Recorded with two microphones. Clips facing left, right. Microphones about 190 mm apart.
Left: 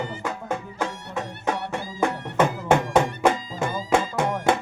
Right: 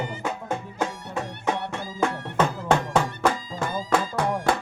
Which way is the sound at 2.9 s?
20° left (ahead or behind).